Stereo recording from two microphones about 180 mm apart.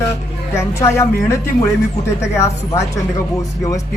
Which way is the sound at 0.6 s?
15° left (ahead or behind).